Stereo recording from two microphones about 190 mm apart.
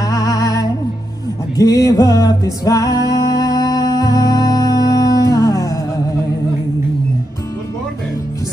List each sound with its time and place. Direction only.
0.0 s music: 20° left (ahead or behind)